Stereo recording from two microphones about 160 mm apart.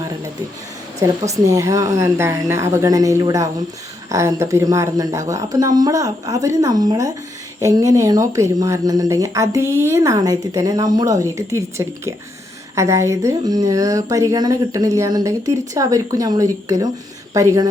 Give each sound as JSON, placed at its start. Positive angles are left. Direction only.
{"t": 0.9, "sound": "speech", "side_deg": -20}